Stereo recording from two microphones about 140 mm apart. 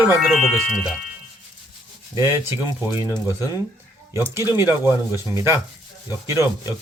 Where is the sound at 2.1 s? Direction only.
20° right (ahead or behind).